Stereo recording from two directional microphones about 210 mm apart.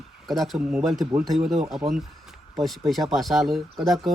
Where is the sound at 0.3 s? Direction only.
Centre (ahead or behind).